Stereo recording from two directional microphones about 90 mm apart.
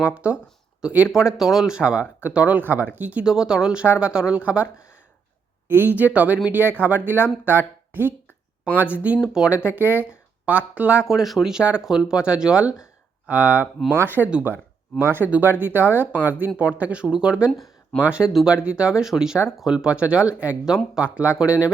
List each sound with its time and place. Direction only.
0.0 s speech: 15° right (ahead or behind)
8.8 s speech: 15° right (ahead or behind)
11.0 s speech: 5° right (ahead or behind)